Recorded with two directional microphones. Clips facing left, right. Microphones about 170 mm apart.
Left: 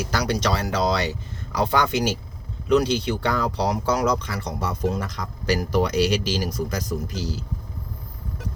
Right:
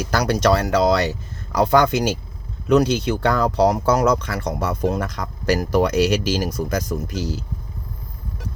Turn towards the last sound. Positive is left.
turn(degrees=-55)  # may be behind; listen again after turning